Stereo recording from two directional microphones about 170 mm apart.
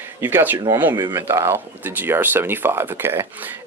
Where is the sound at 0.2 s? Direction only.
10° right (ahead or behind).